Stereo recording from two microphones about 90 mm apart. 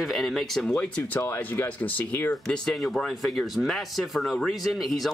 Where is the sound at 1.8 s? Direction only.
20° left (ahead or behind).